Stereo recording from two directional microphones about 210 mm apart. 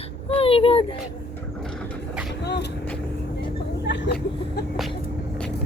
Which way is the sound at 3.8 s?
55° left (ahead or behind).